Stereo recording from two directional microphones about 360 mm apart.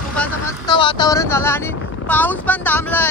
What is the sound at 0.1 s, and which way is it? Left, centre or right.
Speech, centre.